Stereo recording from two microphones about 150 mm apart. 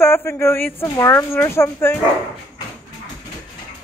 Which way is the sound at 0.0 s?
15° left (ahead or behind).